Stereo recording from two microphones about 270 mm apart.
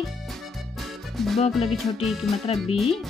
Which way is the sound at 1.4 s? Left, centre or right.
Left.